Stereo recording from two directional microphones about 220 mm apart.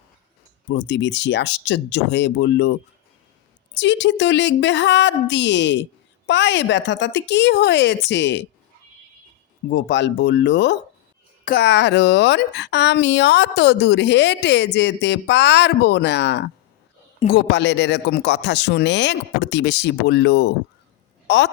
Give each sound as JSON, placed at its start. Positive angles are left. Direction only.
{"t": 0.7, "sound": "speech", "side_deg": 55}
{"t": 3.8, "sound": "speech", "side_deg": 55}
{"t": 9.6, "sound": "speech", "side_deg": 55}